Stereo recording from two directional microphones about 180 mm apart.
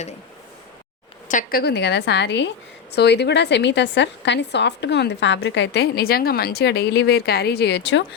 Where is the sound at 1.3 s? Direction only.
55° left (ahead or behind).